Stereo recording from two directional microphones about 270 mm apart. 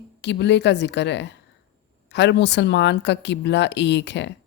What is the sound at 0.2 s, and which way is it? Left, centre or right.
Speech, left.